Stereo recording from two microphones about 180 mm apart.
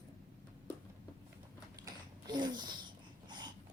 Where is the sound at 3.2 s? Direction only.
25° right (ahead or behind).